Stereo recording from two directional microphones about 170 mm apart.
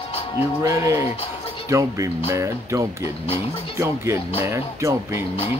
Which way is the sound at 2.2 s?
15° right (ahead or behind).